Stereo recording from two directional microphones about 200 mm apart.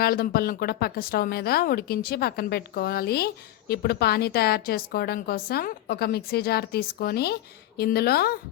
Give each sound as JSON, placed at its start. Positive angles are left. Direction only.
{"t": 0.0, "sound": "a woman's voice", "side_deg": 50}